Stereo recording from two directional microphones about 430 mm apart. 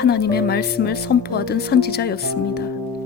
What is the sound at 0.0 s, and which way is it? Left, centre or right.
Speech, left.